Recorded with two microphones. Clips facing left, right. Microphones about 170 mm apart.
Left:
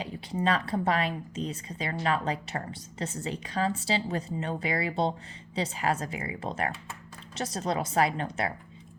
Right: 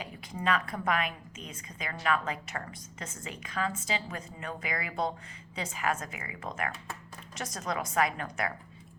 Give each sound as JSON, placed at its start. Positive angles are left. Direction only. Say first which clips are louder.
{"t": 0.0, "sound": "a woman's voice", "louder": "left 5 dB", "side_deg": 30}